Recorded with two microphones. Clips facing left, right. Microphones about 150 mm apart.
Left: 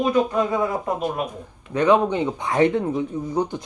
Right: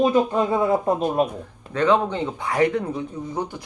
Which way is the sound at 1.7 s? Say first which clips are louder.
Left 2 dB; 15° left (ahead or behind).